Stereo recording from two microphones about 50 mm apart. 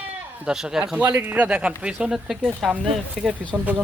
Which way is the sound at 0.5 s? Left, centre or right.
Centre.